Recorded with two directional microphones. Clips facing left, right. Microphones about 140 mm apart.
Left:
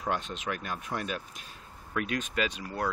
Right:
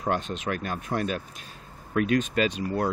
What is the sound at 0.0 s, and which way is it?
Speech, 45° right (ahead or behind).